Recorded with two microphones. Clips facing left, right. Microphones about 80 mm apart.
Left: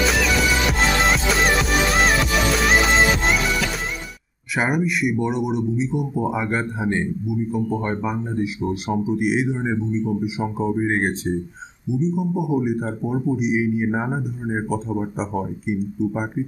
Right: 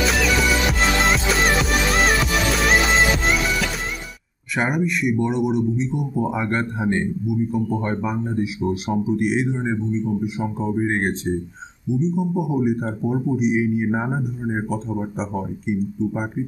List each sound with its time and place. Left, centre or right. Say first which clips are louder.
0.1 s music: even; centre
4.6 s a man's voice: left 1 dB; centre